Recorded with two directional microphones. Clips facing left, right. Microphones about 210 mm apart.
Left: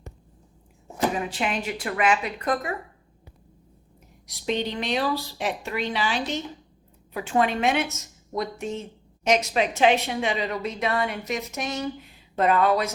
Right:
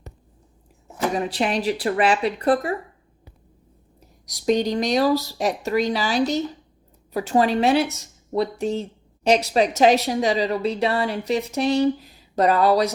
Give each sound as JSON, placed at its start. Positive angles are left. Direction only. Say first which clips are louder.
{"t": 1.1, "sound": "a woman's voice", "louder": "right 5 dB", "side_deg": -35}
{"t": 4.3, "sound": "a woman's voice", "louder": "right 7 dB", "side_deg": -40}